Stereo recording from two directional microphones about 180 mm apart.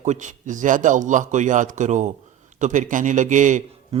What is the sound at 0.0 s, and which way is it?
A man's voice, 40° right (ahead or behind).